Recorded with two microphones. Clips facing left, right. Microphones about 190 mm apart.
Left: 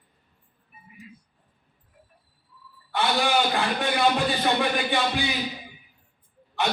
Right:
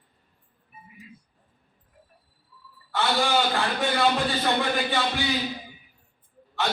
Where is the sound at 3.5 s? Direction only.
15° left (ahead or behind).